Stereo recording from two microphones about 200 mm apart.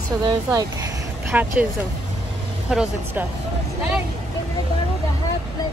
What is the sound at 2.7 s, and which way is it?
Speech, 5° right (ahead or behind).